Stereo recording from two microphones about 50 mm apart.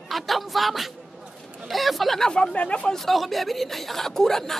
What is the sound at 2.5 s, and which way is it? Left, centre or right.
Speech, left.